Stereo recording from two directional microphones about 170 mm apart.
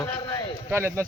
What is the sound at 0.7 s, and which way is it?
Speech, 15° right (ahead or behind).